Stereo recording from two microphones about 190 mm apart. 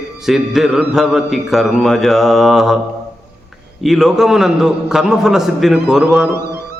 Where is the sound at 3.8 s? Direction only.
Centre (ahead or behind).